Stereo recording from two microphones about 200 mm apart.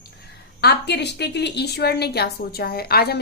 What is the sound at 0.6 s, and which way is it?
A woman's voice, 55° left (ahead or behind).